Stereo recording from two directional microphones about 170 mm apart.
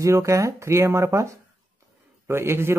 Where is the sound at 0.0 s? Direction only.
20° right (ahead or behind).